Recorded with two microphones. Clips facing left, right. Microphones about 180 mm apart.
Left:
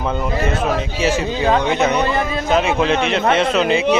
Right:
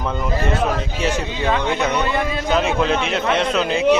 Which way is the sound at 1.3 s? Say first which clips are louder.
Left 4 dB; 35° left (ahead or behind).